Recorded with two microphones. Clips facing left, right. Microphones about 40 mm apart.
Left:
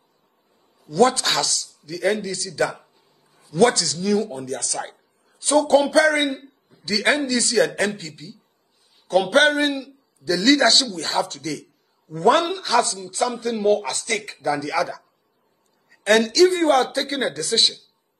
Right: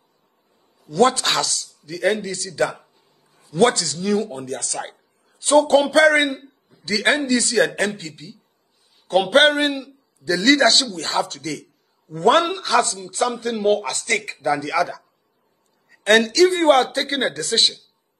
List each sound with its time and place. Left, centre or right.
0.8 s a man's voice: right
9.1 s a man's voice: right